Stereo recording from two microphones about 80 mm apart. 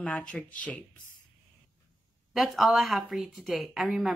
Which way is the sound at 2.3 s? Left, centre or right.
Centre.